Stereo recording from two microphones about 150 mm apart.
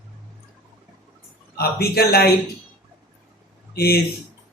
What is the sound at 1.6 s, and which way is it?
Speech, 90° left.